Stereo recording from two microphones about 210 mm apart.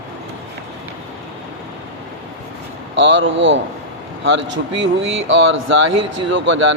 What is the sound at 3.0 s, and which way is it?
Speech, 60° right (ahead or behind).